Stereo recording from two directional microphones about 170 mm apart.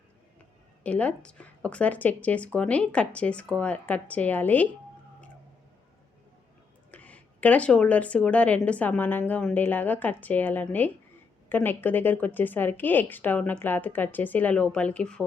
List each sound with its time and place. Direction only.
0.9 s speech: 10° left (ahead or behind)
6.9 s speech: 10° left (ahead or behind)